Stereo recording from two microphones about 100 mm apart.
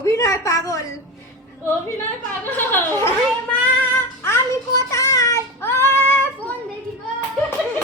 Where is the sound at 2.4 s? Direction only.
20° left (ahead or behind).